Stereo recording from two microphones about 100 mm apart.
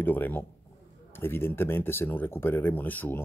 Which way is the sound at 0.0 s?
20° left (ahead or behind).